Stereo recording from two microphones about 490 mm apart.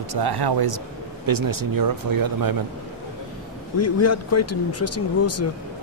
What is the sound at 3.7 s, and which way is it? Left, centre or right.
Speech, left.